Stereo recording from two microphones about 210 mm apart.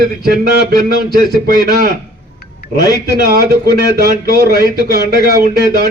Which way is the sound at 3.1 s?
45° right (ahead or behind).